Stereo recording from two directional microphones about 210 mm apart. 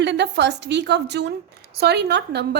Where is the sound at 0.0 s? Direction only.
55° right (ahead or behind).